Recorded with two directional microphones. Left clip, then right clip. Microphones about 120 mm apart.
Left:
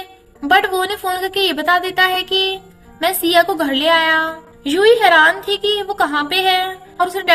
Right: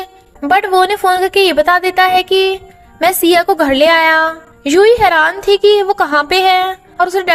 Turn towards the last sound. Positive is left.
turn(degrees=-60)  # may be behind; listen again after turning